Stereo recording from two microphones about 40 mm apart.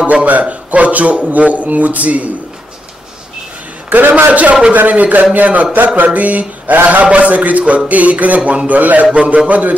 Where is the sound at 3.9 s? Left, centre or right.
Right.